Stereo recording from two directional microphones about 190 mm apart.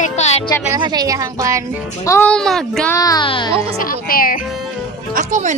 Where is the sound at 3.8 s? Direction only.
50° left (ahead or behind).